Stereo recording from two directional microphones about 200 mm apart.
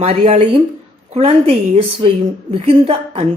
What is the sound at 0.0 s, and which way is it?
A woman's voice, 30° right (ahead or behind).